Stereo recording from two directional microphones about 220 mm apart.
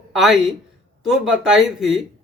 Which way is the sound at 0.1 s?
Centre (ahead or behind).